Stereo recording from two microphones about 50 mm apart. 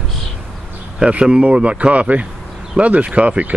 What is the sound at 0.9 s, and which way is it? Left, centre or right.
Speech, right.